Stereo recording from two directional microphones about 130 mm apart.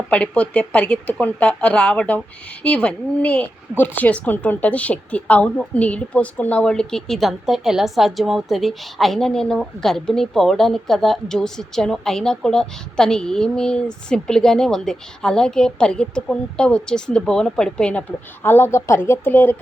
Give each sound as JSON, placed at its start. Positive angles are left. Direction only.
{"t": 0.1, "sound": "speech", "side_deg": 10}
{"t": 18.4, "sound": "speech", "side_deg": 15}